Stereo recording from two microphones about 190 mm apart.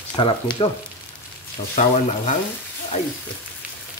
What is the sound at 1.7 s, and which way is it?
Speech, 35° left (ahead or behind).